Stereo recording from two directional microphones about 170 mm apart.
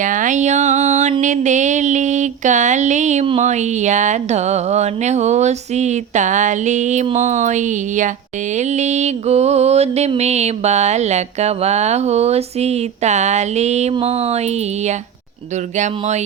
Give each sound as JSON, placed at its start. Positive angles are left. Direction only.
{"t": 0.0, "sound": "a sound", "side_deg": -50}
{"t": 1.2, "sound": "speech", "side_deg": -45}
{"t": 8.5, "sound": "music", "side_deg": -45}